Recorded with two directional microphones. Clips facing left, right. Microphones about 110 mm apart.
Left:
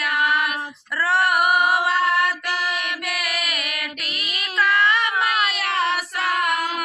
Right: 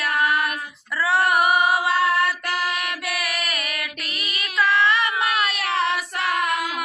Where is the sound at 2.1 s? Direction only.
Centre (ahead or behind).